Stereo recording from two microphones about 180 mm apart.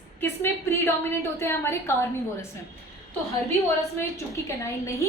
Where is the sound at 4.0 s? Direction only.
15° left (ahead or behind).